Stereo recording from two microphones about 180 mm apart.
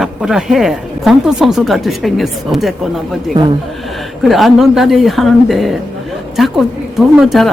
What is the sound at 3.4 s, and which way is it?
Speech, 20° right (ahead or behind).